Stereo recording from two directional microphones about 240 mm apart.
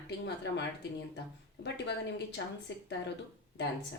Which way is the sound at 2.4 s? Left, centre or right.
Left.